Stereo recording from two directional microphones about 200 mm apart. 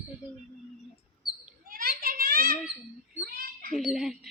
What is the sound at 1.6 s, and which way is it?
Children playing, 45° right (ahead or behind).